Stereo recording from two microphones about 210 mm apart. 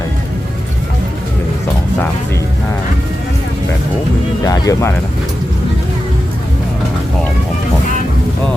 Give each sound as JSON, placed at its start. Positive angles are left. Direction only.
{"t": 4.4, "sound": "speech", "side_deg": 15}